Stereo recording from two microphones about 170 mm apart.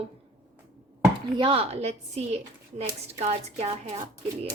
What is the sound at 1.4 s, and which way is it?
A woman's voice, 35° right (ahead or behind).